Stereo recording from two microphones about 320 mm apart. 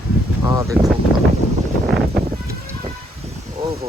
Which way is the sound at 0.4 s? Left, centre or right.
Centre.